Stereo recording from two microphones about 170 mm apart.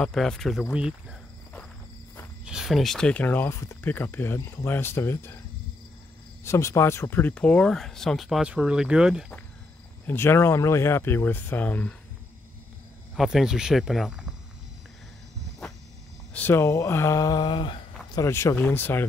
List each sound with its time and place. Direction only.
0.0 s speech: 5° left (ahead or behind)
2.4 s speech: 5° right (ahead or behind); by 5.4 s 15° left (ahead or behind)
6.4 s speech: 15° left (ahead or behind); by 9.2 s 5° right (ahead or behind)
10.0 s speech: 15° left (ahead or behind)
13.1 s speech: centre (ahead or behind)
16.3 s speech: 15° left (ahead or behind); by 17.8 s 30° left (ahead or behind)
18.1 s speech: 15° left (ahead or behind)